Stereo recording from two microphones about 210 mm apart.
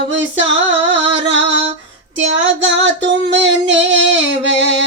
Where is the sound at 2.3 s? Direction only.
60° right (ahead or behind).